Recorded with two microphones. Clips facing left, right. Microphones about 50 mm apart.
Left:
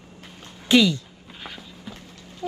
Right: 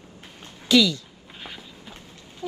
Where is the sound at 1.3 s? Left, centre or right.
Centre.